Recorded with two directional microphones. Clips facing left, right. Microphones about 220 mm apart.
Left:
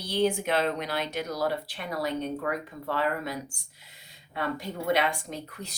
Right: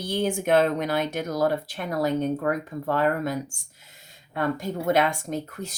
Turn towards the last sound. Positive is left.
turn(degrees=-45)  # may be behind; listen again after turning